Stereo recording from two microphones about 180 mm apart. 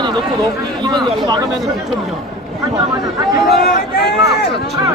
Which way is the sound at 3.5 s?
60° left (ahead or behind).